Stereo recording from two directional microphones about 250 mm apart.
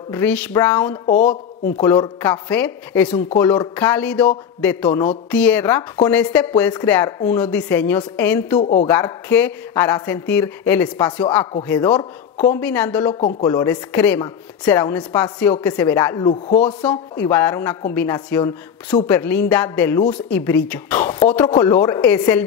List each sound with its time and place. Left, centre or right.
0.1 s speech: centre
1.0 s a woman's voice: left
1.8 s speech: centre
8.5 s speech: left
8.8 s speech: centre
13.1 s speech: centre